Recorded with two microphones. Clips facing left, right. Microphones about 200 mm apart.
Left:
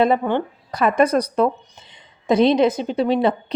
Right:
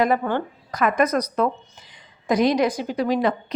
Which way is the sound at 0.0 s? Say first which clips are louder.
Left 3 dB; 20° left (ahead or behind).